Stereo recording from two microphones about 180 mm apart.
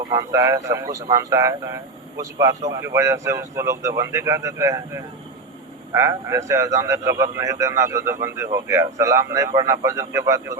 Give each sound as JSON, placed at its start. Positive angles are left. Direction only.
{"t": 0.1, "sound": "a man's voice", "side_deg": -20}